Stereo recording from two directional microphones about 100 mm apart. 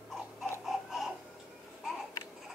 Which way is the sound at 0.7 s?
Centre (ahead or behind).